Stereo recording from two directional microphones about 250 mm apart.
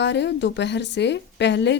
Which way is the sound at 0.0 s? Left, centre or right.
Left.